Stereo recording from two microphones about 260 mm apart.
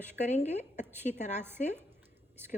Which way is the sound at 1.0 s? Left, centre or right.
Left.